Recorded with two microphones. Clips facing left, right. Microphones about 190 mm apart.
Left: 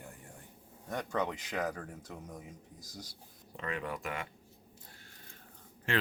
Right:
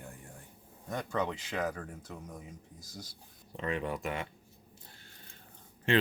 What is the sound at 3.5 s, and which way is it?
Speech, 25° right (ahead or behind).